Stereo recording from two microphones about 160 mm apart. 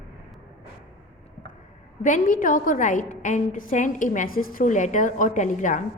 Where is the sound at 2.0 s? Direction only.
55° left (ahead or behind).